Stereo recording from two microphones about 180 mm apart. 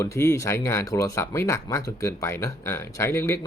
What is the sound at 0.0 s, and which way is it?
Speech, 15° left (ahead or behind).